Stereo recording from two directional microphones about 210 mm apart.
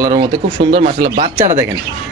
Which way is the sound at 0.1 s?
50° right (ahead or behind).